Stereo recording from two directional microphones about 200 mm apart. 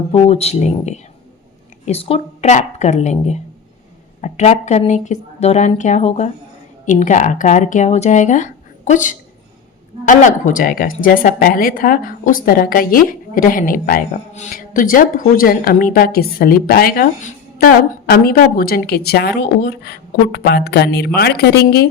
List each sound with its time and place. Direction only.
0.1 s a woman's voice: 30° left (ahead or behind); by 21.8 s 55° left (ahead or behind)